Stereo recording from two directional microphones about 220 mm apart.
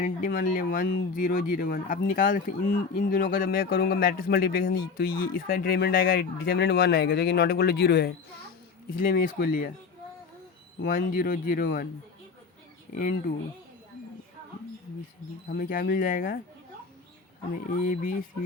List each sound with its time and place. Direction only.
0.0 s speech: 40° left (ahead or behind)
10.8 s speech: 40° left (ahead or behind)
12.9 s speech: 40° left (ahead or behind)
15.4 s speech: 40° left (ahead or behind)
17.7 s speech: 35° left (ahead or behind)